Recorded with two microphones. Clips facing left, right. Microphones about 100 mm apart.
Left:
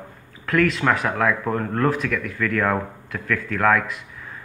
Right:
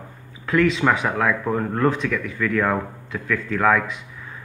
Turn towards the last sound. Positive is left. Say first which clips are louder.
# even
turn(degrees=0)  # may be behind; listen again after turning